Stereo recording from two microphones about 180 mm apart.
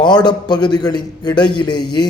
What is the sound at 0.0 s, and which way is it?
A man's voice, 25° left (ahead or behind).